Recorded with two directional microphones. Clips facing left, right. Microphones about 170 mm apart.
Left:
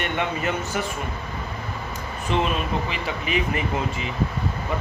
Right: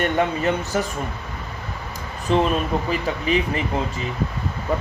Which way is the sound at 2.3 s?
35° right (ahead or behind).